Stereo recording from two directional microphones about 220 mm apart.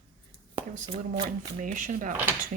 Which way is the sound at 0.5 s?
20° right (ahead or behind).